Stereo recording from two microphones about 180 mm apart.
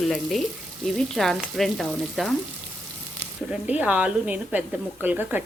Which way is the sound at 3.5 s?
10° right (ahead or behind).